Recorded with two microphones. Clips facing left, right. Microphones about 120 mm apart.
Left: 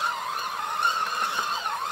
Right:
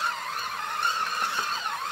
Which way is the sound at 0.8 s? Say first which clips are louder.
Left 1 dB; 15° left (ahead or behind).